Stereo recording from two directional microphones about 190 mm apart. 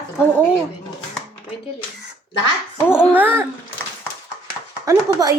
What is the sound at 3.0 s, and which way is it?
Speech, 10° right (ahead or behind).